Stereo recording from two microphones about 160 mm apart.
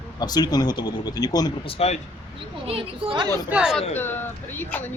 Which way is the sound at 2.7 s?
35° right (ahead or behind).